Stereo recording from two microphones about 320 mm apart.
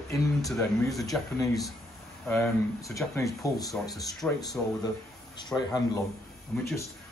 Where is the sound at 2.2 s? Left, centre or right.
Centre.